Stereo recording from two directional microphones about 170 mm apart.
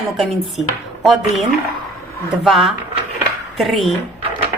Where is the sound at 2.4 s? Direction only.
Centre (ahead or behind).